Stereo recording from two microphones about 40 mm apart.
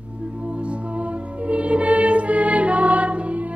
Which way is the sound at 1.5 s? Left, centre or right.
Right.